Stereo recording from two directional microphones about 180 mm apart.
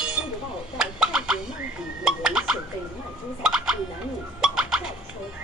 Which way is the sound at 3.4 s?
5° right (ahead or behind).